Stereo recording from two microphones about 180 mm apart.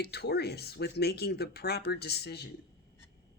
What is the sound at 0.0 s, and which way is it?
Speech, 65° left (ahead or behind).